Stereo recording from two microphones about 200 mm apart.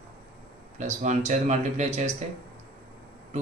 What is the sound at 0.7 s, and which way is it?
Speech, 35° right (ahead or behind).